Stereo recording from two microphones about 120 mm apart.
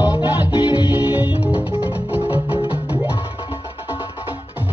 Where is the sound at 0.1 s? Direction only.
40° left (ahead or behind).